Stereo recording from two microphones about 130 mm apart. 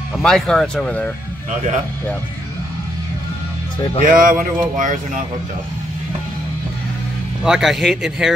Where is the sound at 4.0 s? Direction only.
90° right.